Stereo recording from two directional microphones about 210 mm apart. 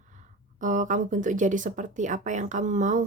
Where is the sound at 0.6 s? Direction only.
35° right (ahead or behind).